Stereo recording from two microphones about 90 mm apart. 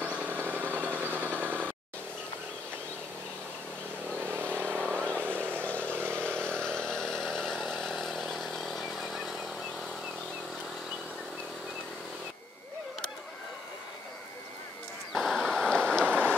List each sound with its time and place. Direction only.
0.0 s vehicle: 15° right (ahead or behind)
4.2 s vehicle: 25° right (ahead or behind)
5.0 s vehicle: 15° left (ahead or behind)
5.3 s vehicle: 20° right (ahead or behind)
5.9 s chainsaw: 15° left (ahead or behind)
7.8 s a sound: centre (ahead or behind)
15.1 s a sound: 5° left (ahead or behind)
15.9 s rain on surface: 10° left (ahead or behind)